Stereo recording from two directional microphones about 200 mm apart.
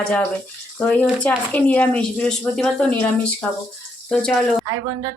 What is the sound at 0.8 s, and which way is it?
Speech, 5° left (ahead or behind).